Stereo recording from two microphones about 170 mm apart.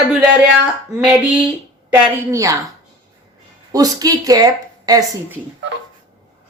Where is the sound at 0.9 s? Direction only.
5° right (ahead or behind).